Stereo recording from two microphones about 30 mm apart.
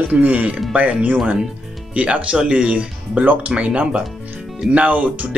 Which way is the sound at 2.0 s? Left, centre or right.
Right.